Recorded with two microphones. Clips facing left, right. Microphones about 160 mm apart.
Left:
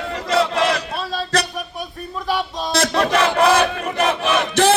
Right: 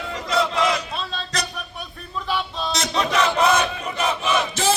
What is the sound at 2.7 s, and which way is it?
Battle cry, 60° left (ahead or behind).